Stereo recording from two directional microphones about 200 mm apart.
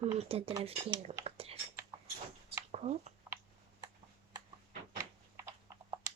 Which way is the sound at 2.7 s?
35° right (ahead or behind).